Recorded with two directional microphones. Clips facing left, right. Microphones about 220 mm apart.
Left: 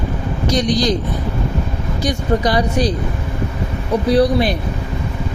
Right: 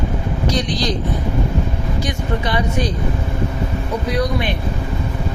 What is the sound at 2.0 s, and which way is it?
Speech, 40° left (ahead or behind).